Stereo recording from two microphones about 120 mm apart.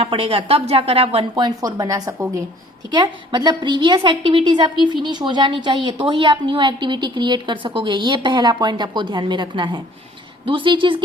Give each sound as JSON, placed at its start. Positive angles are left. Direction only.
{"t": 0.0, "sound": "a woman's voice", "side_deg": -50}
{"t": 1.4, "sound": "speech", "side_deg": -35}
{"t": 2.9, "sound": "a woman's voice", "side_deg": -40}